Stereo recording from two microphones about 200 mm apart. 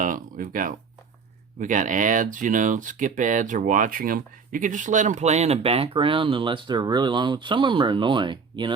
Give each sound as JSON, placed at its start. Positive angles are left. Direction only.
{"t": 0.0, "sound": "speech", "side_deg": -40}